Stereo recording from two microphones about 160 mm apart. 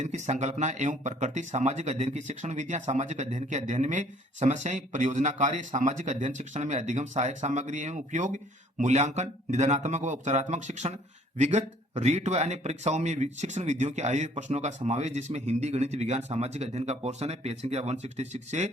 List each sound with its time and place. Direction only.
0.0 s speech: 45° right (ahead or behind)